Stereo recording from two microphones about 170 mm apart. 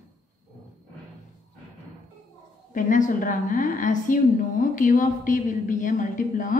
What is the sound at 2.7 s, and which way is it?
A woman's voice, 50° left (ahead or behind).